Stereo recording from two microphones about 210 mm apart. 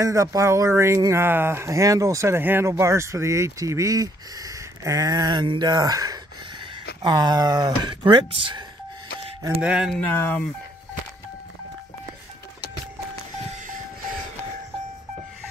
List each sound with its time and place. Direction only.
0.0 s speech: 15° right (ahead or behind)
9.6 s speech: 5° right (ahead or behind)
9.9 s speech: 10° left (ahead or behind)
13.5 s music: 40° right (ahead or behind)